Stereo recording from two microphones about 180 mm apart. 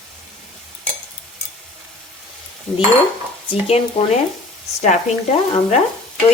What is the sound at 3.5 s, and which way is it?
Speech, 35° left (ahead or behind).